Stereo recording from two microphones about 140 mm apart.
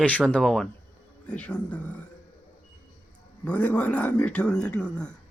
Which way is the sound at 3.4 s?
10° left (ahead or behind).